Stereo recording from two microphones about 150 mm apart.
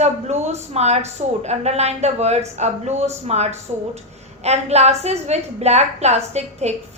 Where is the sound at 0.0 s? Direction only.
50° right (ahead or behind).